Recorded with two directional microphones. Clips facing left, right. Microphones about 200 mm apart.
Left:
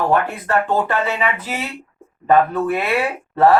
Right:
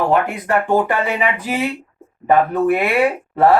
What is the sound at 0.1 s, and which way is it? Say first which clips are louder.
Speech: right 1 dB; 15° right (ahead or behind).